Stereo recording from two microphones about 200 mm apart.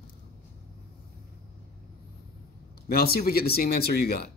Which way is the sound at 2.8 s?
50° left (ahead or behind).